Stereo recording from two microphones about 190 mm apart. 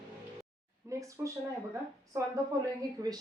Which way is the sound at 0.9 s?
15° right (ahead or behind).